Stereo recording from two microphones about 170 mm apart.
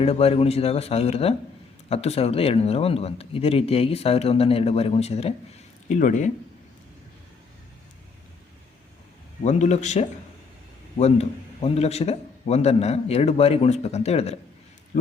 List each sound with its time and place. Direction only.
0.0 s a man's voice: 35° left (ahead or behind)
9.4 s a man's voice: 40° left (ahead or behind)